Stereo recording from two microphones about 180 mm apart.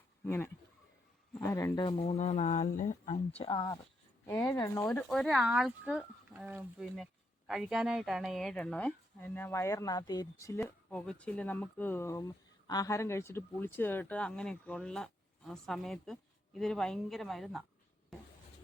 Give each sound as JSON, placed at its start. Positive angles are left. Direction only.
{"t": 0.3, "sound": "speech", "side_deg": 15}
{"t": 4.9, "sound": "speech", "side_deg": 0}